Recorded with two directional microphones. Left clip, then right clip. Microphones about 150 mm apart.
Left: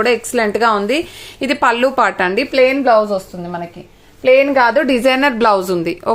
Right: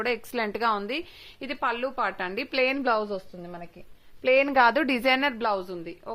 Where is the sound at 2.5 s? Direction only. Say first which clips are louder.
Left 12 dB; 50° right (ahead or behind).